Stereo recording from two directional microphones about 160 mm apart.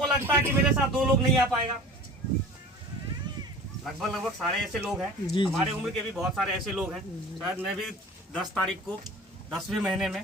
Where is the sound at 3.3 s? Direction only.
25° right (ahead or behind).